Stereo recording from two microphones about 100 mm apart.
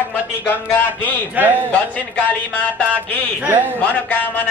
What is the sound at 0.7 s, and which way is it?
Speech, 15° left (ahead or behind).